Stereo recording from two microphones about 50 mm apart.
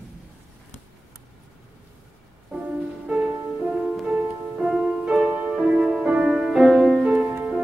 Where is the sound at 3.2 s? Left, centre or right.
Centre.